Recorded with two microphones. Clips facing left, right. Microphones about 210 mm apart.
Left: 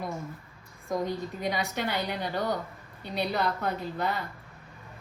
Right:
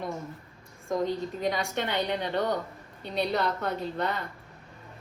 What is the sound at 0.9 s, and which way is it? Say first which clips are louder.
A woman's voice: right 2 dB; 5° left (ahead or behind).